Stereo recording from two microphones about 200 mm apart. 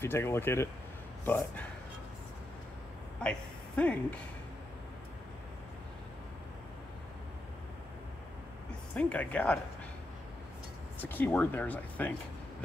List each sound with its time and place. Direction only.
0.0 s speech: 10° left (ahead or behind)
3.2 s a woman's voice: 5° left (ahead or behind)
8.9 s speech: 5° left (ahead or behind)
11.0 s speech: 10° left (ahead or behind)